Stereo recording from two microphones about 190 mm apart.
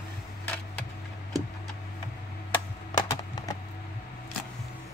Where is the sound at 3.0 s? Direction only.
20° left (ahead or behind).